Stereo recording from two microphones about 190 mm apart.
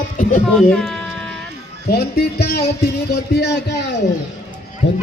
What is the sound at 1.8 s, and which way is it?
Speech, 55° left (ahead or behind).